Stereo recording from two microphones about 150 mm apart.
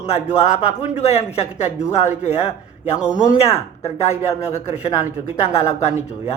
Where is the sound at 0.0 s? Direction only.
45° left (ahead or behind).